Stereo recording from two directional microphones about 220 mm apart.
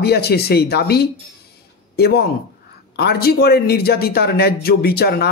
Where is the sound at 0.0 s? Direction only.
45° left (ahead or behind).